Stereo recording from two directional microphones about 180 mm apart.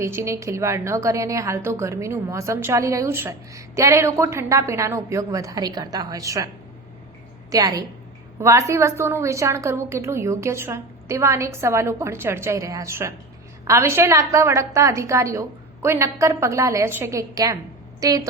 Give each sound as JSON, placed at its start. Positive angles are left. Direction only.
{"t": 0.0, "sound": "a woman's voice", "side_deg": -15}
{"t": 7.5, "sound": "a woman's voice", "side_deg": -20}